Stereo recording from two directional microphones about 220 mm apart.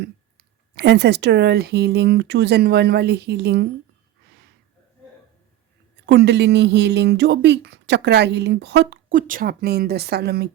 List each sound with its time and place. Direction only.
0.8 s speech: 50° right (ahead or behind)
6.1 s speech: 50° right (ahead or behind)